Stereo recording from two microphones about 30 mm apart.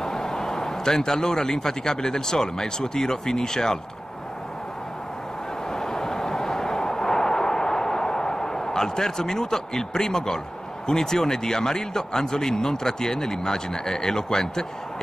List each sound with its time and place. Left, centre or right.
0.0 s a man's voice: centre
5.7 s vehicle: centre
10.9 s a man's voice: centre